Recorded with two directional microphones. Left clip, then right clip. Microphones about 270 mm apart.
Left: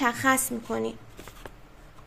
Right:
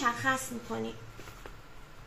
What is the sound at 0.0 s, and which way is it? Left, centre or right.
Speech, left.